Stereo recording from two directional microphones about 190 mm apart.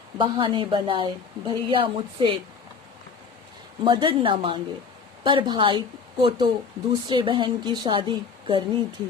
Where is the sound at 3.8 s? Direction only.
25° right (ahead or behind).